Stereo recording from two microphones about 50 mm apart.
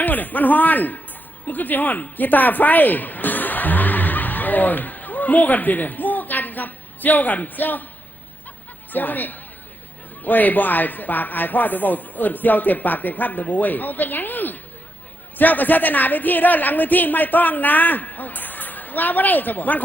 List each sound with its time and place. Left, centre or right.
0.0 s a woman's voice: left
8.9 s a woman's voice: left